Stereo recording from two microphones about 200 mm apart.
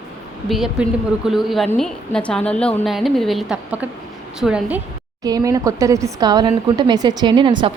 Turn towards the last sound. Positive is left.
turn(degrees=-25)  # may be behind; listen again after turning